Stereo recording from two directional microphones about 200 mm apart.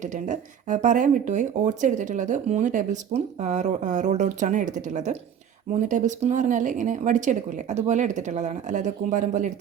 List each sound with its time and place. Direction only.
0.0 s speech: 40° right (ahead or behind)